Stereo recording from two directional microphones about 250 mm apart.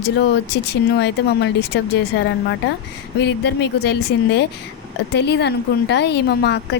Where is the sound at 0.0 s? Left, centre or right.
Left.